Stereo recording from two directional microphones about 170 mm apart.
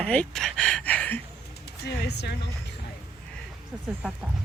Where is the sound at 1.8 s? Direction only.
75° left (ahead or behind).